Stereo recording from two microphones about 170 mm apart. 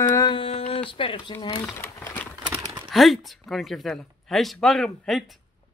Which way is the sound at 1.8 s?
15° left (ahead or behind).